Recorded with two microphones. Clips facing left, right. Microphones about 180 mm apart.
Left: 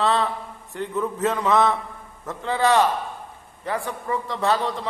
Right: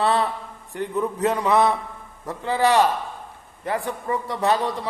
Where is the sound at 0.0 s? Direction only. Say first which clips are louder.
Right 1 dB; 15° right (ahead or behind).